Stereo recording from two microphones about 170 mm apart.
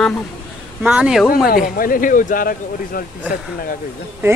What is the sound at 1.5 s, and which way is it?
Speech, 55° left (ahead or behind).